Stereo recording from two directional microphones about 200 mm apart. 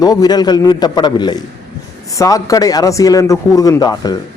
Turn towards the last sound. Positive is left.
turn(degrees=20)  # may be behind; listen again after turning